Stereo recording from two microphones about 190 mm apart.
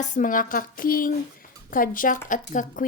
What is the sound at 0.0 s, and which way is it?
Speech, 40° left (ahead or behind).